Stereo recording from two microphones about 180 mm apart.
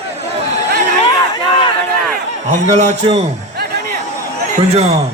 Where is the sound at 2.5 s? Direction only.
40° right (ahead or behind).